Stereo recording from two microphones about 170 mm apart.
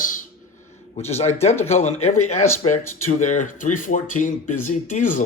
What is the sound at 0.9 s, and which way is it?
Speech, 40° left (ahead or behind).